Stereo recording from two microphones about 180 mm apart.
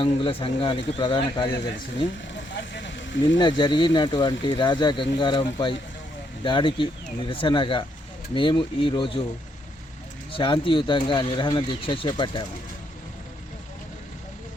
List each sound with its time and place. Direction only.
0.0 s speech: 30° left (ahead or behind)
2.3 s vehicle: 90° left
3.3 s speech: 25° left (ahead or behind)
10.3 s speech: 30° left (ahead or behind)